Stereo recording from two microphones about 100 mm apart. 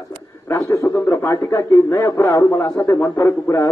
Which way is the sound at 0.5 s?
25° left (ahead or behind).